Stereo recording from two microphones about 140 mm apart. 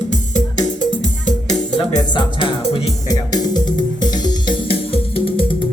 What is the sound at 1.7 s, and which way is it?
Music, 30° left (ahead or behind).